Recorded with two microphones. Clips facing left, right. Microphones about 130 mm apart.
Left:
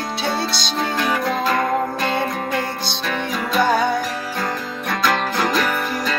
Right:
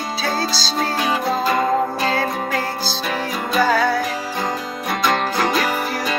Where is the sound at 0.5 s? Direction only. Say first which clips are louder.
Right 1 dB; 30° right (ahead or behind).